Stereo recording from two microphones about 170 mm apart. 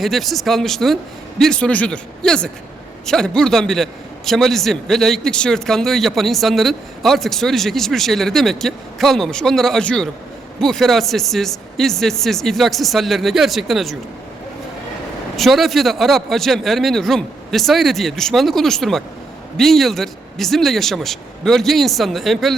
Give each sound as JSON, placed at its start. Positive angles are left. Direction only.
{"t": 0.0, "sound": "a man's voice", "side_deg": 0}
{"t": 15.4, "sound": "a man's voice", "side_deg": 0}